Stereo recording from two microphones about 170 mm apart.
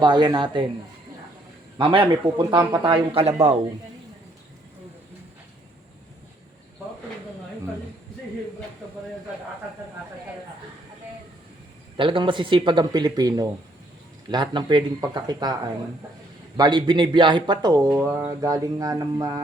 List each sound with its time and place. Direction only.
0.0 s speech: 25° right (ahead or behind)
1.8 s speech: 30° right (ahead or behind)
11.9 s speech: 30° right (ahead or behind)
17.9 s speech: 10° right (ahead or behind)